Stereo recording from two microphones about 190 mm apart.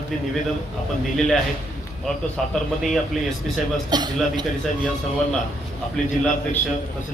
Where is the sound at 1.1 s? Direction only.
Centre (ahead or behind).